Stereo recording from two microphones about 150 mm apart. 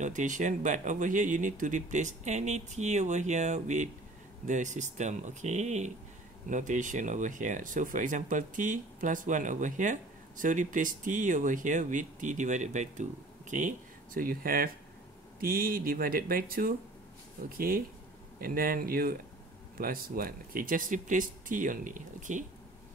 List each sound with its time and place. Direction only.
0.0 s speech: 55° right (ahead or behind)